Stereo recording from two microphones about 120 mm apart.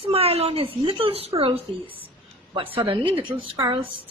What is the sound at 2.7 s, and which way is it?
A woman's voice, 45° right (ahead or behind).